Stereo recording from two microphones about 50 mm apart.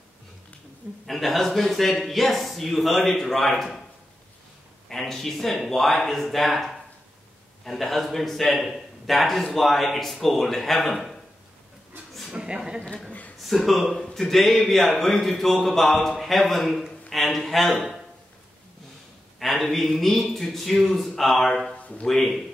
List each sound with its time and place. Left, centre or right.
1.0 s a man's voice: centre
4.8 s a man's voice: centre
12.3 s speech: centre
13.4 s a man's voice: centre
17.1 s a sound: centre
19.4 s a man's voice: centre
21.7 s a sound: left
22.0 s speech: centre